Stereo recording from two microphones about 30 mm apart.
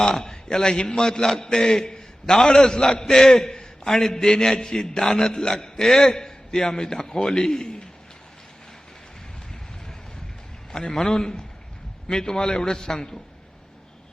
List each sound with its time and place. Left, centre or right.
0.0 s a man's voice: left
10.7 s a man's voice: left